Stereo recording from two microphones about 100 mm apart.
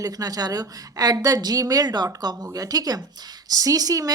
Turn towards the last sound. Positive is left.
turn(degrees=-40)  # may be behind; listen again after turning